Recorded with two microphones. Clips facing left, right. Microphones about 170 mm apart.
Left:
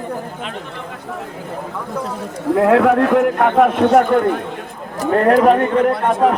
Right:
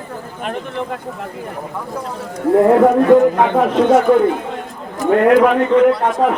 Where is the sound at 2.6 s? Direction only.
90° left; by 4.3 s 55° left (ahead or behind).